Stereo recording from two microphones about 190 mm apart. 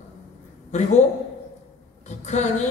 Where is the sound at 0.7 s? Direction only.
40° left (ahead or behind).